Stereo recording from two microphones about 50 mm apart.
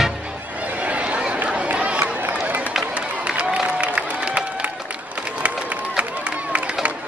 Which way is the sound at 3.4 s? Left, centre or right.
Right.